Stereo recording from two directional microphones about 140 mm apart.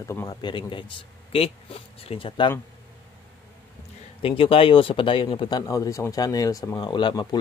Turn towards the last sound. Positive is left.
turn(degrees=30)  # may be behind; listen again after turning